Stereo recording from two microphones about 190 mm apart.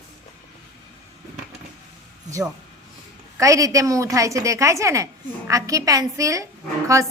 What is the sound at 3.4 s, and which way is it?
A woman's voice, 15° right (ahead or behind).